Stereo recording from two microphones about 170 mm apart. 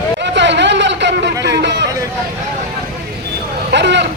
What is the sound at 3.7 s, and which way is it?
Vehicle, 90° right.